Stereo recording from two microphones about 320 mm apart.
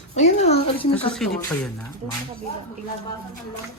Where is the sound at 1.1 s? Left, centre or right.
Centre.